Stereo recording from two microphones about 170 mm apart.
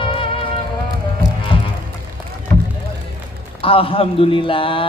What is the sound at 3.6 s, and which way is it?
A man's voice, 35° left (ahead or behind).